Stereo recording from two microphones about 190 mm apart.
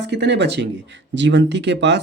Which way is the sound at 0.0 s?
65° right (ahead or behind).